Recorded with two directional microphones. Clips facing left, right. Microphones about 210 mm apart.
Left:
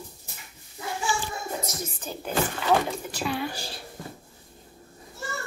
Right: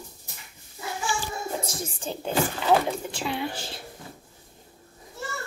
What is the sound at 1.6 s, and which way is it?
A child's voice, 30° right (ahead or behind).